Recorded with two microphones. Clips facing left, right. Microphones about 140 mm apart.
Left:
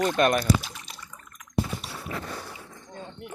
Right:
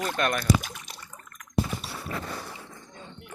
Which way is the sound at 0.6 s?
5° right (ahead or behind).